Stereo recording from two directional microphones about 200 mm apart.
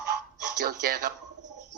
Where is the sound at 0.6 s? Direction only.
50° right (ahead or behind).